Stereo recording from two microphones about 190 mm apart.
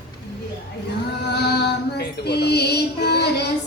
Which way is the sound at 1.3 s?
60° left (ahead or behind).